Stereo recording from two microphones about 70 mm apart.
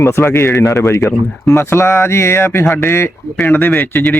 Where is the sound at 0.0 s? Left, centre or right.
Left.